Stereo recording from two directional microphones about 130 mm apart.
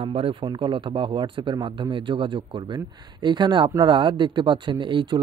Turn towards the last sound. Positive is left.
turn(degrees=-35)  # may be behind; listen again after turning